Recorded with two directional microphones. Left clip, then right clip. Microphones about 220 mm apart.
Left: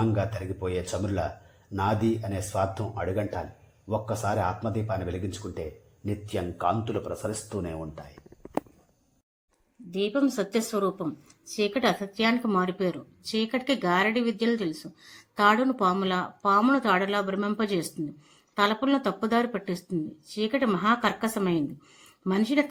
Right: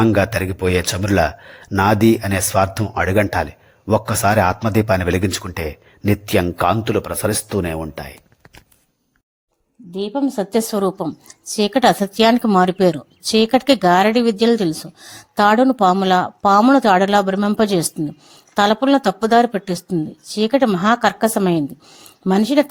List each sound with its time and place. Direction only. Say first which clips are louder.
0.0 s speech: right 13 dB; 35° right (ahead or behind)
10.0 s a woman's voice: right 5 dB; 35° right (ahead or behind)